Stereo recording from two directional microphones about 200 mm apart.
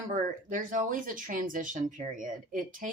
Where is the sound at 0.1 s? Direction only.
40° right (ahead or behind).